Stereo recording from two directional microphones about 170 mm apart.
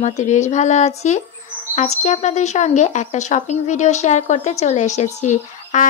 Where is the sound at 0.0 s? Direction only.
45° left (ahead or behind).